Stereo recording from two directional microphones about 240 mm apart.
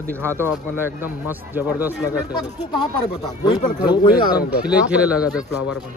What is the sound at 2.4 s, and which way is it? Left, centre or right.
Speech, centre.